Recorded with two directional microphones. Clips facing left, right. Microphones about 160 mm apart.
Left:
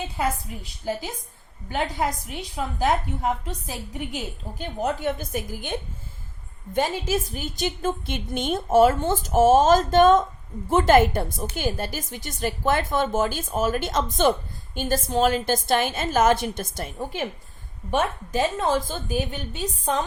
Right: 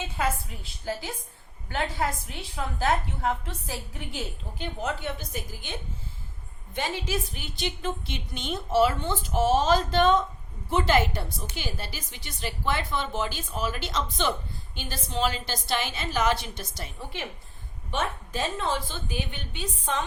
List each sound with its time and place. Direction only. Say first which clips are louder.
1.7 s a woman's voice: left 3 dB; 20° left (ahead or behind)
4.5 s a woman's voice: left 5 dB; 45° left (ahead or behind)